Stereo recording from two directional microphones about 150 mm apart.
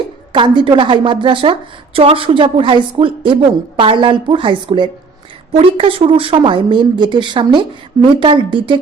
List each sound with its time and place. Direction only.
0.3 s a woman's voice: 30° right (ahead or behind)